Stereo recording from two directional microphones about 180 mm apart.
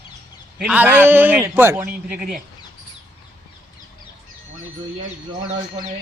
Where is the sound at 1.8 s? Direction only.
55° right (ahead or behind).